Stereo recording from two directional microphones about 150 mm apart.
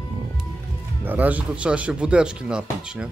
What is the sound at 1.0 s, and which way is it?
Speech, 10° right (ahead or behind).